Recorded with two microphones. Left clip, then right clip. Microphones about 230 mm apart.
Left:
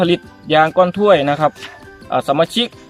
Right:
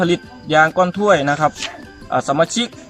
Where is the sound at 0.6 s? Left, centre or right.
Centre.